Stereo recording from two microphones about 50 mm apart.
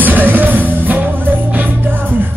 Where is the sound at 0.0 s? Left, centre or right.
Right.